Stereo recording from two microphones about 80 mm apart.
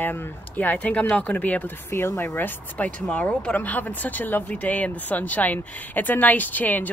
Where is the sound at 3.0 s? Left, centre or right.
Centre.